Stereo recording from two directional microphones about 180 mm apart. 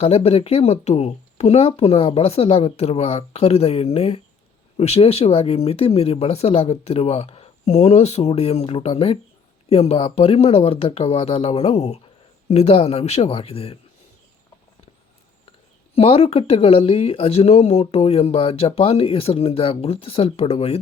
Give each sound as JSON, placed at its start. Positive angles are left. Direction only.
{"t": 0.0, "sound": "speech", "side_deg": 35}
{"t": 16.0, "sound": "speech", "side_deg": 35}